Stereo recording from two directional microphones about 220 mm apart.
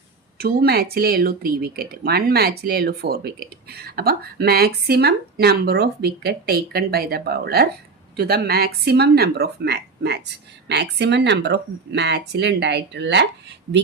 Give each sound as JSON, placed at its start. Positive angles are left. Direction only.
{"t": 0.3, "sound": "speech", "side_deg": -45}